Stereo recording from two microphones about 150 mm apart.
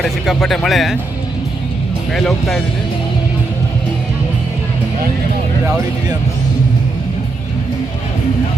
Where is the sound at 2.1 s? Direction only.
Centre (ahead or behind).